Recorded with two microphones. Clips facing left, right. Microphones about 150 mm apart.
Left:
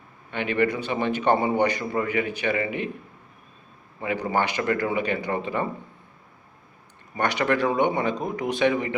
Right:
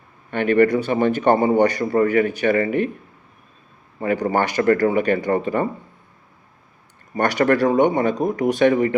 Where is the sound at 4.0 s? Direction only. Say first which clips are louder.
Right 5 dB; 45° right (ahead or behind).